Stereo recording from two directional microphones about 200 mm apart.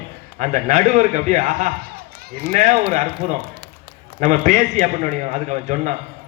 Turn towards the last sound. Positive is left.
turn(degrees=-40)  # may be behind; listen again after turning